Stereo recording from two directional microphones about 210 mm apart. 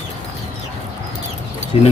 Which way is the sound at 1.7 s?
25° left (ahead or behind).